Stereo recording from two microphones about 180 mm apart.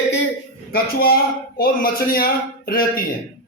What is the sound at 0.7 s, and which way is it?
Speech, 55° left (ahead or behind).